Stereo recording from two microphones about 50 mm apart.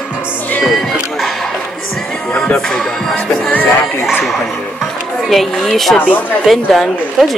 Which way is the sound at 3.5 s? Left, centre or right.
Left.